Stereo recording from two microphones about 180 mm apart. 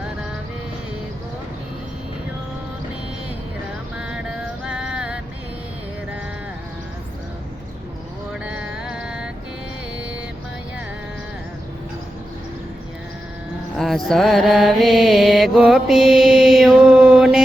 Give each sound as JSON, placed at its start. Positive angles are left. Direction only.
{"t": 4.6, "sound": "music", "side_deg": -5}
{"t": 8.3, "sound": "music", "side_deg": -5}
{"t": 13.7, "sound": "mantra", "side_deg": 0}